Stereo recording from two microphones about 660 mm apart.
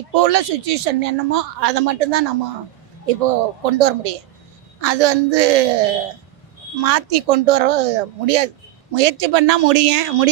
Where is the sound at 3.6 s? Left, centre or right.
Right.